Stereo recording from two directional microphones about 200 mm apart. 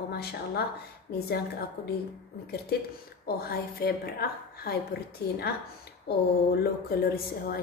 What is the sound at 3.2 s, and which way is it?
A woman's voice, 50° left (ahead or behind).